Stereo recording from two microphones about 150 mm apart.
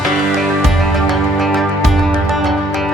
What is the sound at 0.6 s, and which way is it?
Music, centre (ahead or behind).